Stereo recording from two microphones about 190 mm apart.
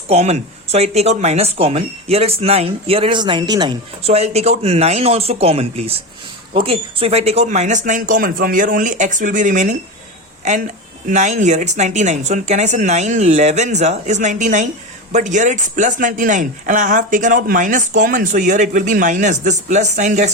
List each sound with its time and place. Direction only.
0.1 s speech: 35° right (ahead or behind)
11.1 s speech: 40° right (ahead or behind)